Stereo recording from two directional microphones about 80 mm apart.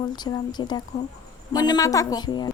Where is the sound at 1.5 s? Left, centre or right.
Left.